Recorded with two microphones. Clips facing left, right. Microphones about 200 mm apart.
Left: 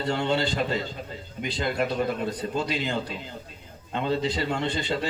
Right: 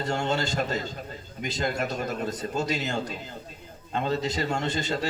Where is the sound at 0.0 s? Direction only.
45° right (ahead or behind).